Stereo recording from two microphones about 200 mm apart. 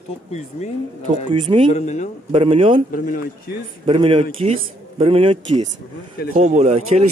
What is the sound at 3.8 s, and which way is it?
A man's voice, 25° right (ahead or behind).